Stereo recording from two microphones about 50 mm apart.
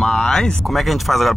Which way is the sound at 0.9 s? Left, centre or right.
Centre.